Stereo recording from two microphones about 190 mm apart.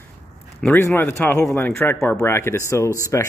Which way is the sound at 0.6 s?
10° left (ahead or behind).